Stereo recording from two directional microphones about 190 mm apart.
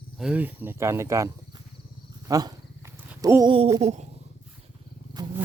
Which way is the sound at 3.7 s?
35° right (ahead or behind).